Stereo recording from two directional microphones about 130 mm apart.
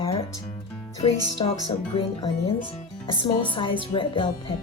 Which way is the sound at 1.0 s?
50° left (ahead or behind).